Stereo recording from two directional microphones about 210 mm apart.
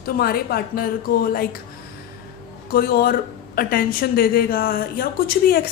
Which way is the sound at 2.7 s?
45° left (ahead or behind).